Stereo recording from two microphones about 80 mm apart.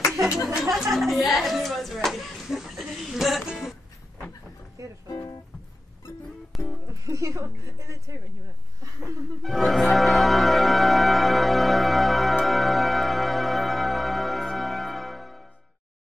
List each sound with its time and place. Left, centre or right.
0.7 s speech: centre
2.0 s music: centre
4.8 s music: right
6.5 s music: centre
6.9 s speech: right
9.4 s speech: centre
9.9 s music: centre